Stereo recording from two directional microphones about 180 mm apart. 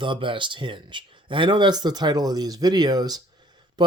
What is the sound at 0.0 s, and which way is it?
Speech, 25° right (ahead or behind).